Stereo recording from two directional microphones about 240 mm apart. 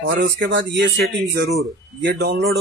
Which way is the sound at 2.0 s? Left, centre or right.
Right.